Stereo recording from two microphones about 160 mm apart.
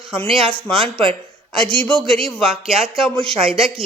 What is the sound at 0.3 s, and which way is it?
Speech, 35° right (ahead or behind).